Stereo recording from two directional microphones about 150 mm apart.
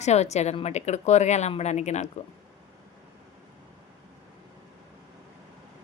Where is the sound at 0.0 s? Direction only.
50° left (ahead or behind).